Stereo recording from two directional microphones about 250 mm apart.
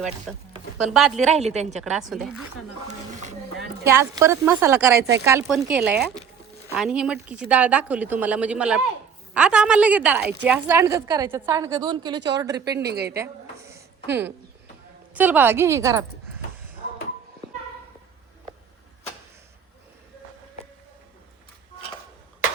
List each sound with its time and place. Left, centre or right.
0.3 s speech: centre
1.2 s a woman's voice: right
1.8 s speech: centre
2.8 s a sound: right
3.8 s a woman's voice: centre
12.8 s a woman's voice: right
13.1 s a sound: centre
15.1 s a woman's voice: centre